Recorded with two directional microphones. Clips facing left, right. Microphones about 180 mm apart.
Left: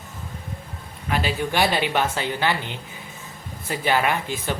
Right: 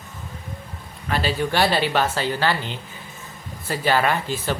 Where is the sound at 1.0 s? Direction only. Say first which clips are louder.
Right 1 dB; 15° left (ahead or behind).